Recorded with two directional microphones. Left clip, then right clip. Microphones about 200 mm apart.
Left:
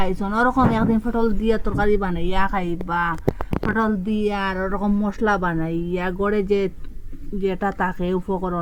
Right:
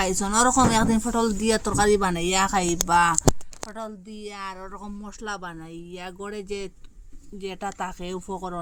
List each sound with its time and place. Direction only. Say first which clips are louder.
0.0 s speech: left 1 dB; 20° right (ahead or behind)